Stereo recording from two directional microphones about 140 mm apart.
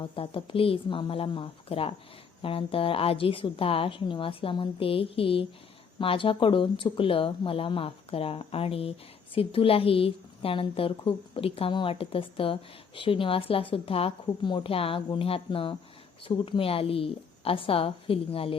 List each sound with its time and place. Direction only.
0.0 s speech: 40° left (ahead or behind)